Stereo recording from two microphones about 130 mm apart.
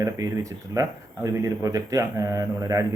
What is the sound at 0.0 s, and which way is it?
Speech, 25° right (ahead or behind).